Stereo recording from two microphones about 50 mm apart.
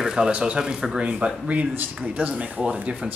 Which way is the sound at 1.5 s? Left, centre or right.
Right.